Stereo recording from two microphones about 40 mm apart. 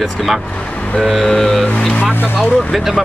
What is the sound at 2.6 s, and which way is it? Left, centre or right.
Speech, centre.